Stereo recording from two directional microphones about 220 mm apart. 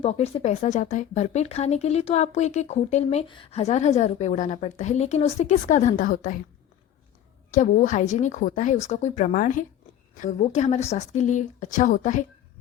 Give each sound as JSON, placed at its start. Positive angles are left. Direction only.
{"t": 0.0, "sound": "speech", "side_deg": 30}
{"t": 7.5, "sound": "speech", "side_deg": 35}